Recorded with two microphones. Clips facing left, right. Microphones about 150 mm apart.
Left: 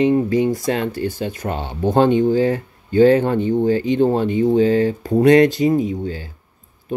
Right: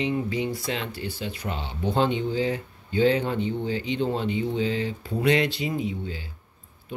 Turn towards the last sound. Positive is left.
turn(degrees=45)  # may be behind; listen again after turning